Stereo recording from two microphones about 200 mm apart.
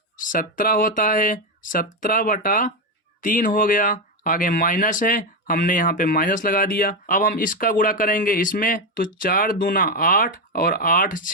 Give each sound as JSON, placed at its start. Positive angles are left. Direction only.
{"t": 0.2, "sound": "speech", "side_deg": 40}